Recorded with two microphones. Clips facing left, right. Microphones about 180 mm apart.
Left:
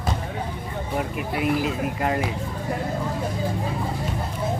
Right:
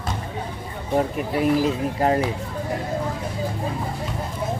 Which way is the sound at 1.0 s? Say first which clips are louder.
Right 5 dB; 35° right (ahead or behind).